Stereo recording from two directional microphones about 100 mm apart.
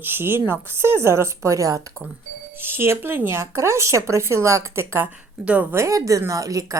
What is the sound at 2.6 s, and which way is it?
Speech, 20° right (ahead or behind).